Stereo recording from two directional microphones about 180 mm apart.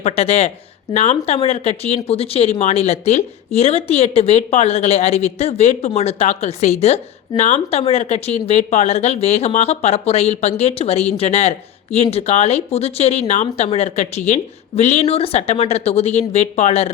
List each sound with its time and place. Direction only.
0.0 s speech: 35° left (ahead or behind)